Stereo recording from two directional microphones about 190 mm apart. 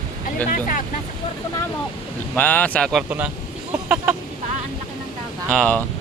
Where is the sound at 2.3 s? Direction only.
10° left (ahead or behind).